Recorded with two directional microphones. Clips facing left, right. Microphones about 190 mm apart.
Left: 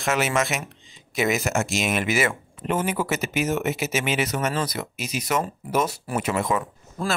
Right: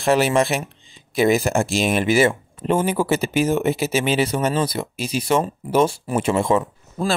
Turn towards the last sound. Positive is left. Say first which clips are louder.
# right 5 dB
turn(degrees=-25)  # may be behind; listen again after turning